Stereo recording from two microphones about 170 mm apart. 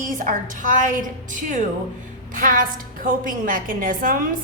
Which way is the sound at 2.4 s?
55° right (ahead or behind).